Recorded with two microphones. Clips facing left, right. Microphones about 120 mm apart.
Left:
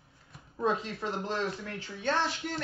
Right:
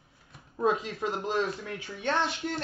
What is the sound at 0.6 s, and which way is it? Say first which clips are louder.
Speech: right 3 dB; 20° right (ahead or behind).